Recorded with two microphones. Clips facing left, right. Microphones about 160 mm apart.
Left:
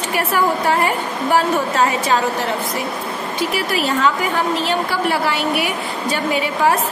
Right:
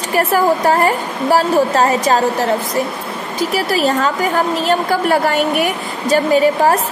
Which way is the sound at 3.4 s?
40° right (ahead or behind).